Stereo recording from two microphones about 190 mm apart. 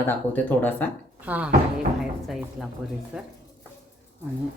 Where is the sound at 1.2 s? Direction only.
10° right (ahead or behind).